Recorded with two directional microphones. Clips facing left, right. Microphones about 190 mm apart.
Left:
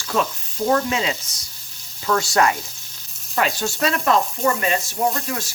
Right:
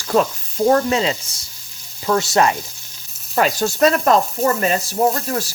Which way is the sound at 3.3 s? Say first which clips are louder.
Right 4 dB; 40° right (ahead or behind).